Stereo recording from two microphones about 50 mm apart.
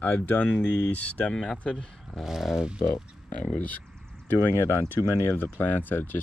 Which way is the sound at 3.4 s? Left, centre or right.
Left.